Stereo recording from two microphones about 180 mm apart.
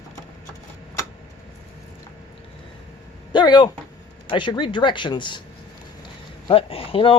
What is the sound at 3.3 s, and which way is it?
Speech, 25° left (ahead or behind).